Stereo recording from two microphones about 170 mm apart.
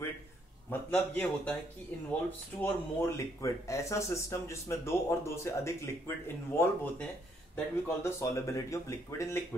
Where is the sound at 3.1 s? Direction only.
20° left (ahead or behind).